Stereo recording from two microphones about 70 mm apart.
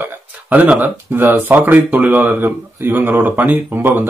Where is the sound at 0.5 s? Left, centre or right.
Right.